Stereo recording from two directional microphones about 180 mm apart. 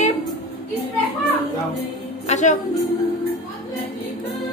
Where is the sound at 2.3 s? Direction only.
40° left (ahead or behind).